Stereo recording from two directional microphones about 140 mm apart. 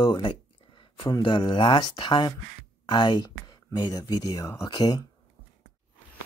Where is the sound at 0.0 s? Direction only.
35° left (ahead or behind).